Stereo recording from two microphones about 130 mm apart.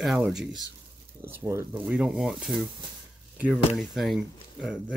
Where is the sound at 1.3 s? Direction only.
20° right (ahead or behind).